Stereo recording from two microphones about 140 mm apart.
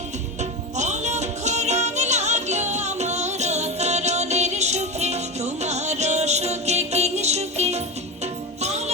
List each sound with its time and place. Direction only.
0.8 s music: 55° right (ahead or behind)